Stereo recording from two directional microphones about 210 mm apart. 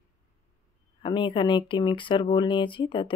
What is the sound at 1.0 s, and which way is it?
Speech, 20° left (ahead or behind).